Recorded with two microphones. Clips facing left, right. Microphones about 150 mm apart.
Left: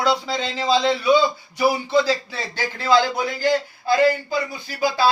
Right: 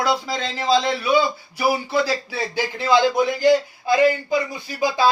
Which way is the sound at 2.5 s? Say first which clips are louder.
Even; 15° right (ahead or behind).